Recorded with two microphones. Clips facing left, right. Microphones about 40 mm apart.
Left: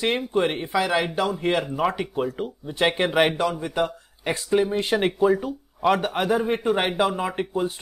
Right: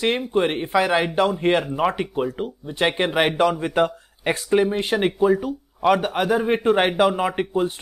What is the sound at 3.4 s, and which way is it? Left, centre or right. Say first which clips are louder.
Speech: right 5 dB; right.